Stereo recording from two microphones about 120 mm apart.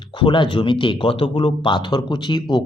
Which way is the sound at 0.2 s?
40° left (ahead or behind).